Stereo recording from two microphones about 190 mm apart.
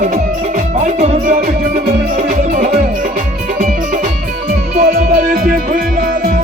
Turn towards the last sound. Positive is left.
turn(degrees=-50)  # may be behind; listen again after turning